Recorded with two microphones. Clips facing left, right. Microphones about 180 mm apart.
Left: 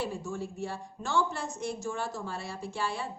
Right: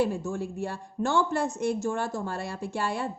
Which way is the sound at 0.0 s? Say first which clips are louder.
Right 7 dB; 55° right (ahead or behind).